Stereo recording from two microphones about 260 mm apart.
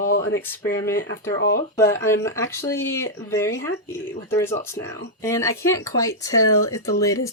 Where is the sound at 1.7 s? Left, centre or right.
Centre.